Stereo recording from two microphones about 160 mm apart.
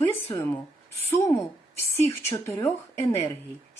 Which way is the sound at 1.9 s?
15° left (ahead or behind).